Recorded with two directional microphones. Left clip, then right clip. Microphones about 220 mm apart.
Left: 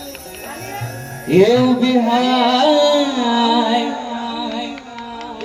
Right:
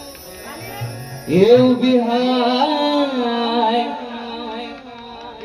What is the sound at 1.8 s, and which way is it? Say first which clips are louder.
Music: left 1 dB; 45° left (ahead or behind).